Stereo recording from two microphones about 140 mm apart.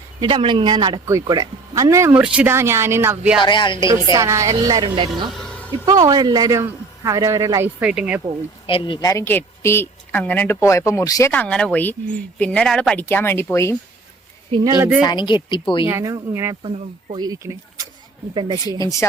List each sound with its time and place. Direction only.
0.2 s speech: 35° right (ahead or behind); by 3.3 s 15° right (ahead or behind)
3.4 s a woman's voice: 35° left (ahead or behind)
4.1 s speech: 20° right (ahead or behind)
5.3 s a sound: 5° left (ahead or behind)
5.8 s speech: 25° right (ahead or behind)
7.8 s speech: 5° right (ahead or behind)
8.6 s a woman's voice: 40° left (ahead or behind)
9.0 s speech: 25° left (ahead or behind)
11.3 s speech: 10° left (ahead or behind)
14.8 s speech: 10° right (ahead or behind)
15.0 s a woman's voice: 30° left (ahead or behind)
15.9 s speech: 20° right (ahead or behind)
16.6 s speech: 35° right (ahead or behind)
18.8 s speech: 25° left (ahead or behind)